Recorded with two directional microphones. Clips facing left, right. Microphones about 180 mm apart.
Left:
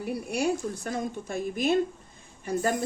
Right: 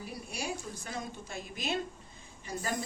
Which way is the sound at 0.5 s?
50° left (ahead or behind).